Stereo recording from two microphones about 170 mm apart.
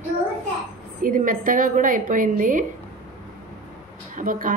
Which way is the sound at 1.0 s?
55° right (ahead or behind).